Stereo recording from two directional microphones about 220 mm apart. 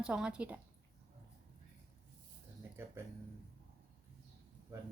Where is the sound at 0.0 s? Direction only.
5° right (ahead or behind).